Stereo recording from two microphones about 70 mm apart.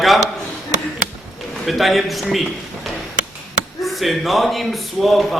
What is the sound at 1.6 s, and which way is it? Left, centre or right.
Speech, centre.